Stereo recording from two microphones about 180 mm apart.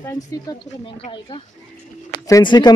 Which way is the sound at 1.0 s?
30° left (ahead or behind).